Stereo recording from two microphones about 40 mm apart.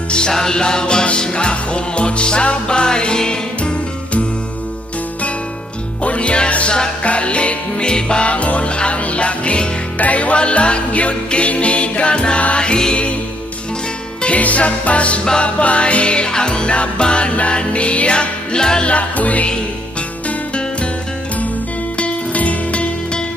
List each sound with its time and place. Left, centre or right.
0.1 s music: left
6.0 s music: left
14.2 s music: left; by 18.9 s centre
18.9 s music: left
20.2 s music: left
21.9 s music: left